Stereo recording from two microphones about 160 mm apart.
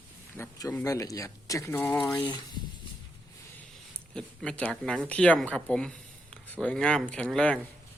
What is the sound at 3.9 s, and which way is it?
Speech, 5° left (ahead or behind).